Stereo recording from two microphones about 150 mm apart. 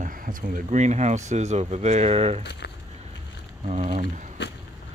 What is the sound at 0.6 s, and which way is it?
Speech, 50° right (ahead or behind).